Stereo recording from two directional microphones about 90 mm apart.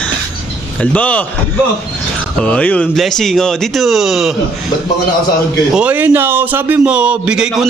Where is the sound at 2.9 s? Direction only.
5° left (ahead or behind).